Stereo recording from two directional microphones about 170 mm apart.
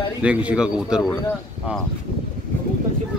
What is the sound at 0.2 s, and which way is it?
Speech, 5° right (ahead or behind).